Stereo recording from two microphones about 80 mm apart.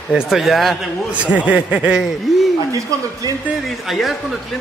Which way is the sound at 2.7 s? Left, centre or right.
Right.